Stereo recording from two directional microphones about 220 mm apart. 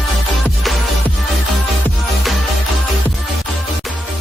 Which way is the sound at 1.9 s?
Centre (ahead or behind).